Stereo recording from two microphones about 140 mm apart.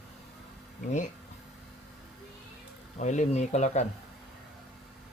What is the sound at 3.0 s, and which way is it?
Speech, 60° left (ahead or behind).